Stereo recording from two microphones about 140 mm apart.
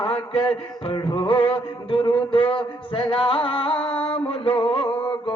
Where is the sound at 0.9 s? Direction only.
35° left (ahead or behind).